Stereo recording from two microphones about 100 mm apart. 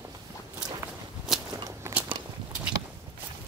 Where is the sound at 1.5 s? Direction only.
35° right (ahead or behind).